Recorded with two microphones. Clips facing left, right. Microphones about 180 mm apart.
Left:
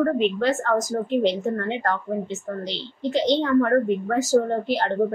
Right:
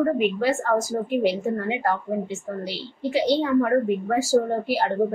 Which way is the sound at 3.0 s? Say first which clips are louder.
Even; 10° right (ahead or behind).